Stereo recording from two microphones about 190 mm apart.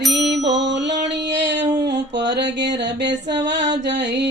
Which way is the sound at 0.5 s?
65° right (ahead or behind).